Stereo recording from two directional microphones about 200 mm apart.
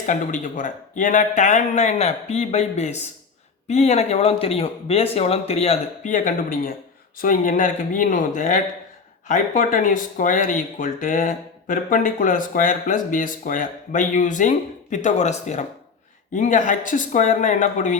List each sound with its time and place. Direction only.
0.0 s speech: 40° left (ahead or behind)